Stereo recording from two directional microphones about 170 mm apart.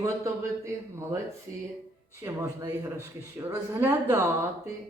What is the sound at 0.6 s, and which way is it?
Speech, 15° right (ahead or behind).